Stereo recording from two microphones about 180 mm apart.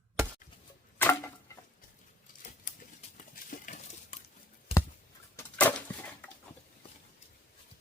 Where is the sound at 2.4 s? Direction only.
45° left (ahead or behind).